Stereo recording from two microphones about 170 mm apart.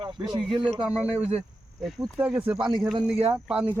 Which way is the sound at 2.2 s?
10° right (ahead or behind).